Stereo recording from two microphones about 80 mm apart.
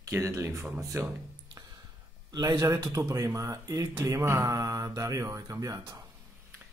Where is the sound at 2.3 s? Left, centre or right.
Right.